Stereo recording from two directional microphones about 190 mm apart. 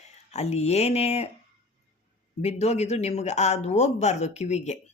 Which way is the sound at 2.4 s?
35° left (ahead or behind).